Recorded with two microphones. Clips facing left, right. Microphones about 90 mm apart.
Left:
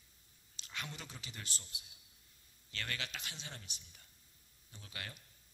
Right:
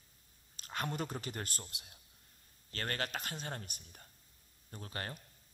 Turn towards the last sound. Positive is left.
turn(degrees=-40)  # may be behind; listen again after turning